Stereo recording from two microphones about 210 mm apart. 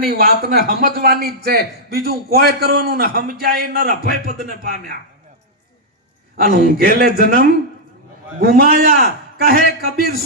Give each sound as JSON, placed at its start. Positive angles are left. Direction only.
{"t": 0.0, "sound": "a man's voice", "side_deg": -45}
{"t": 6.4, "sound": "a man's voice", "side_deg": -40}